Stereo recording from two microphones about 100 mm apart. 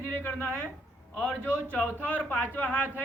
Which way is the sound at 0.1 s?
20° left (ahead or behind).